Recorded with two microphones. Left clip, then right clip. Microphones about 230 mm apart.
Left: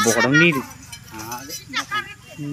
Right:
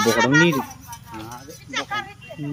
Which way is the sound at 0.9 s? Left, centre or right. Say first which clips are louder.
Left 3 dB; right.